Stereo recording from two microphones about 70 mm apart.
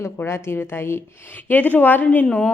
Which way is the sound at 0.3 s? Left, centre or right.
Left.